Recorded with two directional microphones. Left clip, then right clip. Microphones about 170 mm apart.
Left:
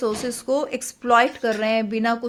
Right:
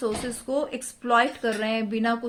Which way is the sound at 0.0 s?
35° left (ahead or behind).